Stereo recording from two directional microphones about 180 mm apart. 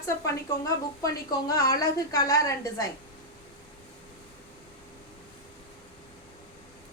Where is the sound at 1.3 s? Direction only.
20° left (ahead or behind).